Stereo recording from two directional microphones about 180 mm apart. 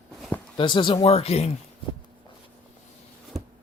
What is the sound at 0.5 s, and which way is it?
Speech, 25° left (ahead or behind).